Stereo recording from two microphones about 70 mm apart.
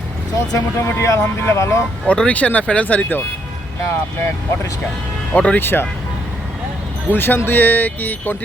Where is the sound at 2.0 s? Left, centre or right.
Centre.